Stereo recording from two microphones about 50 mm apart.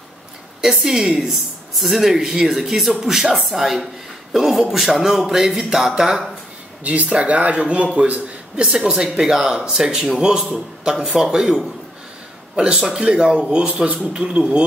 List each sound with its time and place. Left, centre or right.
0.6 s speech: centre
6.8 s a man's voice: right